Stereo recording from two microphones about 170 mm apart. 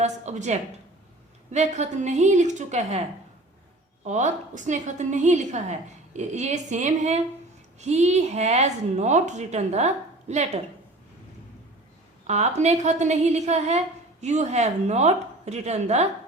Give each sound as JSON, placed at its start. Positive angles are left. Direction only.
{"t": 0.0, "sound": "a woman's voice", "side_deg": -45}
{"t": 4.0, "sound": "a woman's voice", "side_deg": -45}
{"t": 12.3, "sound": "a woman's voice", "side_deg": -40}